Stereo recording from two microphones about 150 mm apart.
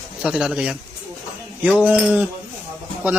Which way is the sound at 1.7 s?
5° right (ahead or behind).